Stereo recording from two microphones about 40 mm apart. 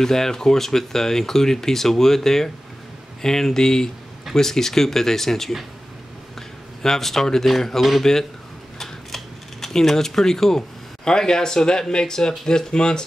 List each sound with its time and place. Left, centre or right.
0.0 s speech: centre
6.8 s speech: centre
8.7 s typewriter: centre
11.1 s speech: centre